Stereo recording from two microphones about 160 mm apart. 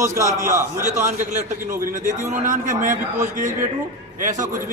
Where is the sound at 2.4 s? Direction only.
50° right (ahead or behind).